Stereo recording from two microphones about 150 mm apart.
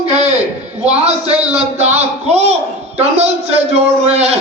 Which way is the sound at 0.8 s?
45° right (ahead or behind).